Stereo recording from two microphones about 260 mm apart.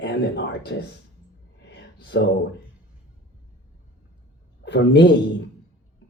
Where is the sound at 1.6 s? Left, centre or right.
Left.